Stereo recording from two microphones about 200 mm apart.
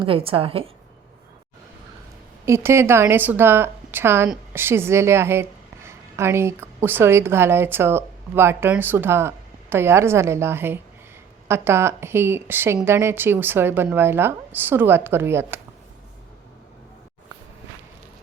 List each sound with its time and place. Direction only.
0.0 s a woman's voice: 25° right (ahead or behind)
2.5 s a woman's voice: 10° right (ahead or behind)